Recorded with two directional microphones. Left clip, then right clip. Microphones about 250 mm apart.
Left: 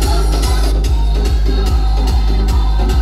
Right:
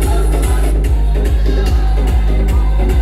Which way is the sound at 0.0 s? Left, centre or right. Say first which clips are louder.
Even; centre.